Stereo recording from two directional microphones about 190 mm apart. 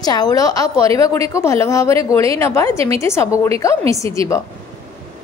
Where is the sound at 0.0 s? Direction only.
20° left (ahead or behind).